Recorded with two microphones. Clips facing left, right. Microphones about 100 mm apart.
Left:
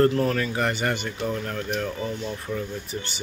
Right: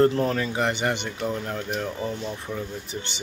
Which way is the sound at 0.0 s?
25° right (ahead or behind).